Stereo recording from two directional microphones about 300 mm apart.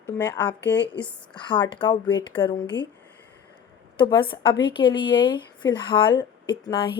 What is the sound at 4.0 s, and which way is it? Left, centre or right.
A woman's voice, centre.